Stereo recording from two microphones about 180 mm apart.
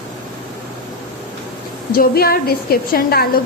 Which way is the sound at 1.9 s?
60° left (ahead or behind).